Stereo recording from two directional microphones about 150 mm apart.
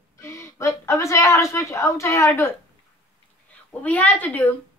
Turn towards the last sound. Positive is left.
turn(degrees=10)  # may be behind; listen again after turning